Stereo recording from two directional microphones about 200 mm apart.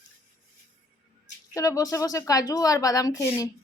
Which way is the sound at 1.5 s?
15° left (ahead or behind).